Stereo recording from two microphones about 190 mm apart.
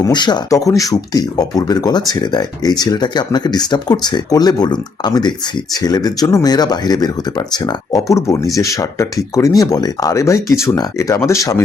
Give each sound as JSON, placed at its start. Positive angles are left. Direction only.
{"t": 0.0, "sound": "speech", "side_deg": 20}